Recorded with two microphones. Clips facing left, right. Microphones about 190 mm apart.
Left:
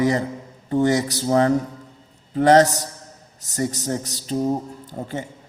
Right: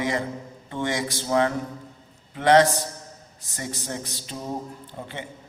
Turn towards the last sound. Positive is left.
turn(degrees=40)  # may be behind; listen again after turning